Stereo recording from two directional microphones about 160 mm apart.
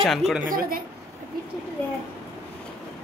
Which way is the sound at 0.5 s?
65° right (ahead or behind).